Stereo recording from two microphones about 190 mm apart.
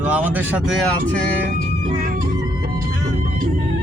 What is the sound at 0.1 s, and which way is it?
Speech, 10° right (ahead or behind).